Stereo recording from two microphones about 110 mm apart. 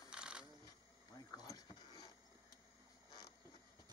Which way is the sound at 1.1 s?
35° left (ahead or behind).